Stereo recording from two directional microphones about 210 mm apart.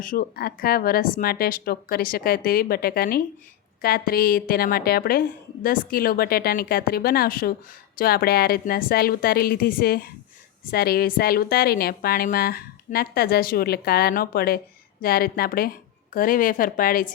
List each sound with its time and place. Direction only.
0.0 s a woman's voice: 40° left (ahead or behind)